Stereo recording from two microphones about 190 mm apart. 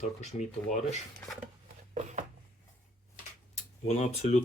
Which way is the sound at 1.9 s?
40° right (ahead or behind).